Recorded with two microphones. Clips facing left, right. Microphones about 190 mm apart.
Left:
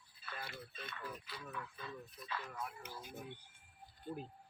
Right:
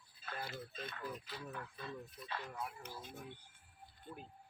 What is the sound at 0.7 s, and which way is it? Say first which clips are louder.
Speech: right 3 dB; 45° right (ahead or behind).